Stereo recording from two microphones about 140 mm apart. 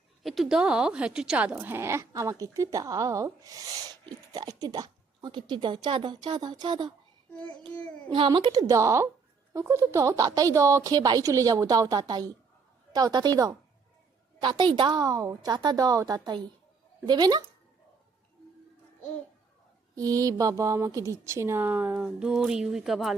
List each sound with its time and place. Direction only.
0.2 s a woman's voice: centre (ahead or behind); by 6.9 s 30° right (ahead or behind)
7.7 s a child's voice: 10° left (ahead or behind)
8.1 s a woman's voice: 35° right (ahead or behind)
20.0 s speech: 25° right (ahead or behind); by 23.1 s centre (ahead or behind)